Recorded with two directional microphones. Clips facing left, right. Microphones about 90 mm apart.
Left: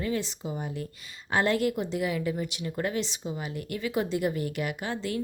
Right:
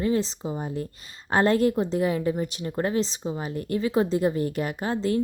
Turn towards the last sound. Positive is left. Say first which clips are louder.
# right 7 dB
turn(degrees=-35)  # may be behind; listen again after turning